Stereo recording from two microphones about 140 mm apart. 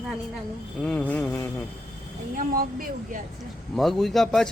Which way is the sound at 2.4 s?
80° right.